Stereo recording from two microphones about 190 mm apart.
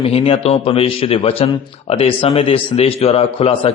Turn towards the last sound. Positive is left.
turn(degrees=30)  # may be behind; listen again after turning